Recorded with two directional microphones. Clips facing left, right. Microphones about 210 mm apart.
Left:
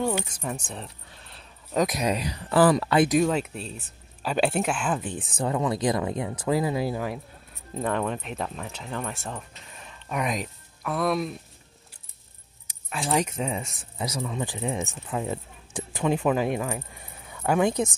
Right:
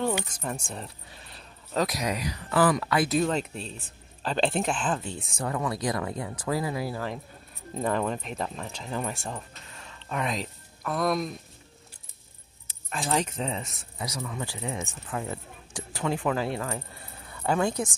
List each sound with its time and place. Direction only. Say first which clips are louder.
0.0 s speech: left 1 dB; 10° left (ahead or behind)
1.7 s speech: left 3 dB; 20° left (ahead or behind)
3.1 s speech: left 3 dB; 10° left (ahead or behind)
7.8 s speech: even; centre (ahead or behind)
9.8 s a sound: left 2 dB; 15° left (ahead or behind)
10.9 s speech: left 1 dB; 5° left (ahead or behind)
12.6 s speech: left 2 dB; 10° left (ahead or behind)
13.9 s speech: left 4 dB; 25° left (ahead or behind)